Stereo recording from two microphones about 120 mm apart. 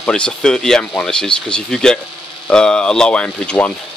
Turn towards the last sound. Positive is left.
turn(degrees=10)  # may be behind; listen again after turning